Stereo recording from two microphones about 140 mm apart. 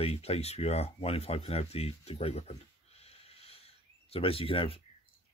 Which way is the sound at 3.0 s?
45° left (ahead or behind).